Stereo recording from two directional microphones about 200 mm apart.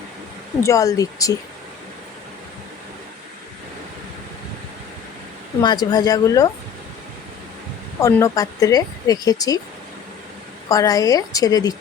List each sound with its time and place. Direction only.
0.6 s a woman's voice: 15° left (ahead or behind)
5.6 s speech: 20° left (ahead or behind)
8.0 s speech: 15° left (ahead or behind)
10.7 s a woman's voice: 15° left (ahead or behind)